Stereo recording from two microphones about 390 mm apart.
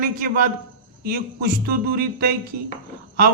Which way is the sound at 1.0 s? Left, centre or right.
Right.